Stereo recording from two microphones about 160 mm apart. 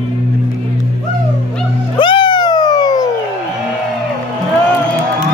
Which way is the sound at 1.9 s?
30° left (ahead or behind).